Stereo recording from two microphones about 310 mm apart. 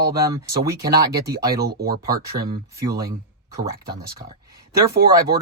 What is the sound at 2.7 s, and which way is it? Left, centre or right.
Speech, centre.